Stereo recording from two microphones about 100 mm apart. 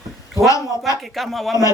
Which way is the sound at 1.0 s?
Centre (ahead or behind).